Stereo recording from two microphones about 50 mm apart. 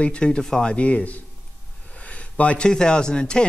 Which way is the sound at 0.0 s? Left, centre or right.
Left.